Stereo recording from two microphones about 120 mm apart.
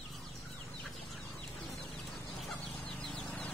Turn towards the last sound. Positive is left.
turn(degrees=10)  # may be behind; listen again after turning